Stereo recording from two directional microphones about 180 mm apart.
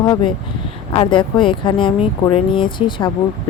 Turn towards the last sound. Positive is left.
turn(degrees=25)  # may be behind; listen again after turning